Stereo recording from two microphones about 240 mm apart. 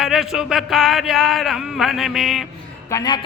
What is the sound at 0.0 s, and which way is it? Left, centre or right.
Speech, centre.